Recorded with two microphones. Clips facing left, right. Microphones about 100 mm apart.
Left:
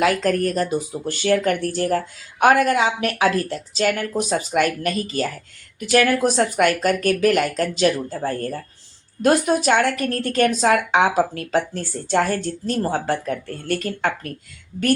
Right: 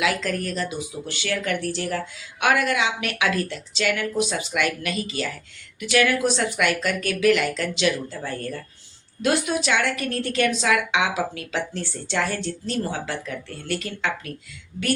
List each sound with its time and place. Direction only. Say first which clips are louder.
0.0 s a woman's voice: left 6 dB; 45° left (ahead or behind)